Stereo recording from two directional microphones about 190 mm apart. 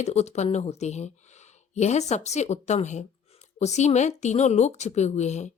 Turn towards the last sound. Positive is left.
turn(degrees=35)  # may be behind; listen again after turning